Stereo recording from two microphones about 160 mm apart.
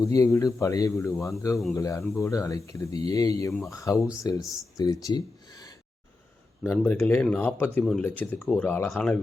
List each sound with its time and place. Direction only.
0.0 s a man's voice: 20° left (ahead or behind); by 9.1 s 5° left (ahead or behind)